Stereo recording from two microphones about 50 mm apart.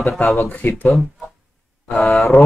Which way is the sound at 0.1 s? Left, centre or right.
Centre.